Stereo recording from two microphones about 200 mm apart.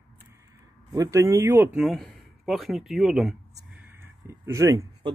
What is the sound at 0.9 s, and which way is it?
Speech, 15° right (ahead or behind).